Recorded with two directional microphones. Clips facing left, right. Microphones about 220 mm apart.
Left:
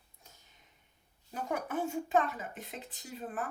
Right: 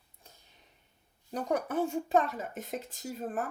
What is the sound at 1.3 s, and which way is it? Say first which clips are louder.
Speech: right 5 dB; 35° right (ahead or behind).